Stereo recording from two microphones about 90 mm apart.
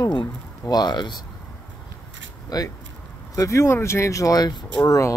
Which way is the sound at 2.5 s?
45° left (ahead or behind).